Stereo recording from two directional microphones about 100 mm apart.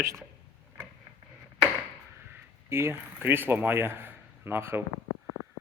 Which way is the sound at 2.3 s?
25° right (ahead or behind).